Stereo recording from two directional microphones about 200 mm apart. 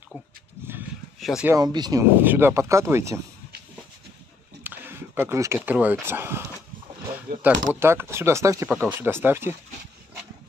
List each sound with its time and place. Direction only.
1.2 s speech: centre (ahead or behind)
1.5 s speech: 20° right (ahead or behind)
4.6 s speech: 10° right (ahead or behind)
7.3 s speech: 55° right (ahead or behind)
7.8 s speech: 10° right (ahead or behind)